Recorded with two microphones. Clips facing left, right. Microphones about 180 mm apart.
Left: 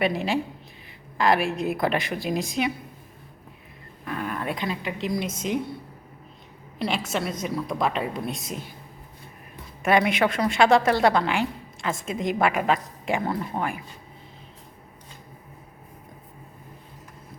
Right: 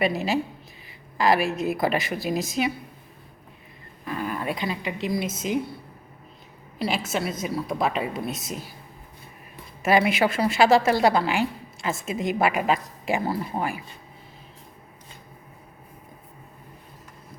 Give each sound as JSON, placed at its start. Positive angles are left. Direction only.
{"t": 0.0, "sound": "a woman's voice", "side_deg": -5}
{"t": 4.0, "sound": "a woman's voice", "side_deg": 0}
{"t": 6.7, "sound": "a woman's voice", "side_deg": -5}
{"t": 9.8, "sound": "a woman's voice", "side_deg": -5}